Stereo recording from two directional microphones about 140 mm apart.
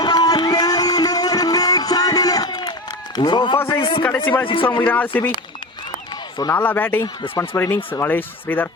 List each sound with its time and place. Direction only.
0.0 s music: 30° left (ahead or behind)
3.2 s a man's voice: 35° left (ahead or behind)
4.8 s speech: 15° left (ahead or behind)
6.5 s speech: 15° left (ahead or behind)
7.0 s speech: 25° left (ahead or behind)